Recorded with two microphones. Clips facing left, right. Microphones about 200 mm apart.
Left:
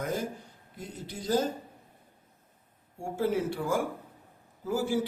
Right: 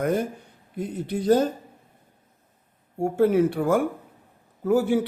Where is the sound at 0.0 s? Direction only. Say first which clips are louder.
Right 8 dB; 60° right (ahead or behind).